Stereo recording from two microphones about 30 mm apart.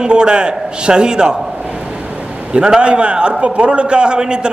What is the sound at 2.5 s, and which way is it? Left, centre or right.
A man's voice, right.